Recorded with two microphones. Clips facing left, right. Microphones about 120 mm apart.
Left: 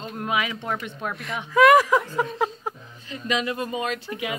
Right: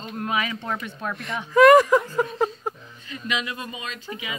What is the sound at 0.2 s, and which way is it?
Speech, 10° left (ahead or behind).